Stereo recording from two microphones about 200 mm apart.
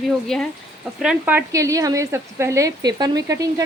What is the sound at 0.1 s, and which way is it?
A woman's voice, centre (ahead or behind).